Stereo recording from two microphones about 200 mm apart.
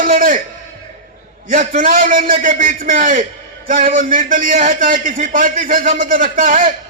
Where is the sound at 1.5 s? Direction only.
45° right (ahead or behind).